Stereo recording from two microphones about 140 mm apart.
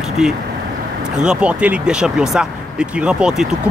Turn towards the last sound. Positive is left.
turn(degrees=-5)  # may be behind; listen again after turning